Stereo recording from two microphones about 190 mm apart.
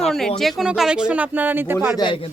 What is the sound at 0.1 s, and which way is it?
Speech, centre (ahead or behind).